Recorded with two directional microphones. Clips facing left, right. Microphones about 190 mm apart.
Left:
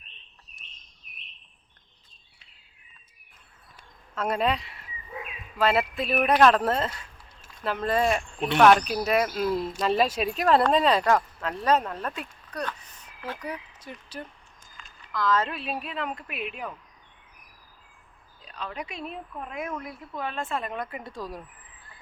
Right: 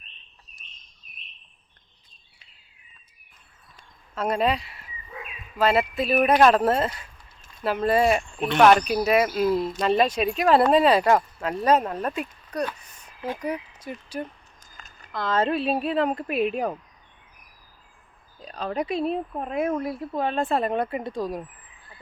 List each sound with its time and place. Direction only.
4.1 s speech: centre (ahead or behind)
14.6 s a sound: 40° right (ahead or behind)
15.1 s speech: 30° right (ahead or behind)
18.4 s speech: 40° right (ahead or behind); by 21.4 s 15° right (ahead or behind)